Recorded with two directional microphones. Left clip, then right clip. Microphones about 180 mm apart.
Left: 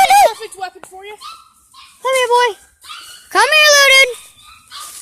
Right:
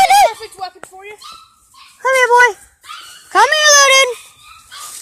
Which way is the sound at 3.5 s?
15° left (ahead or behind).